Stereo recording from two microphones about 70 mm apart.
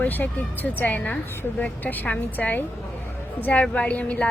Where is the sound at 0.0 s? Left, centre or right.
Left.